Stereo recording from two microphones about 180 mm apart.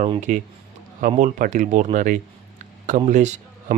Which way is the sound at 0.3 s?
45° right (ahead or behind).